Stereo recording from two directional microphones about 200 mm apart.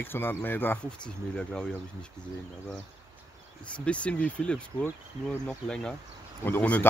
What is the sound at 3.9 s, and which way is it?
Speech, 5° left (ahead or behind).